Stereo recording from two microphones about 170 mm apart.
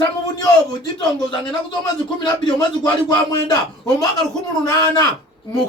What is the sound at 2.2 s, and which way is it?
Speech, 25° left (ahead or behind).